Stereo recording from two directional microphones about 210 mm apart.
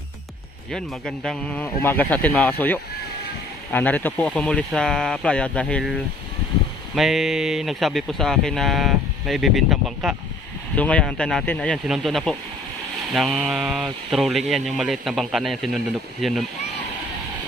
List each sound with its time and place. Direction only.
0.7 s speech: centre (ahead or behind)
7.0 s speech: centre (ahead or behind)